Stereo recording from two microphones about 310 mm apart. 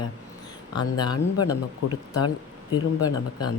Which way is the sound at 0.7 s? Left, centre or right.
Centre.